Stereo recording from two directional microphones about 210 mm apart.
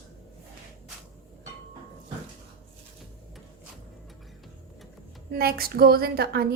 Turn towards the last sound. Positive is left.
turn(degrees=-50)  # may be behind; listen again after turning